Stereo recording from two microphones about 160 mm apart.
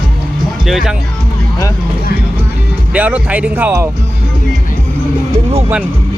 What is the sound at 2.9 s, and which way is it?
Speech, 10° right (ahead or behind).